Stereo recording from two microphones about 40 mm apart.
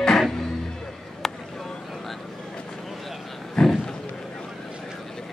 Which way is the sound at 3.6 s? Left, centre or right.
Centre.